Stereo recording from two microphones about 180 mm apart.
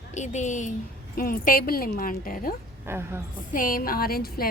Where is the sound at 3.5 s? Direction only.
50° left (ahead or behind).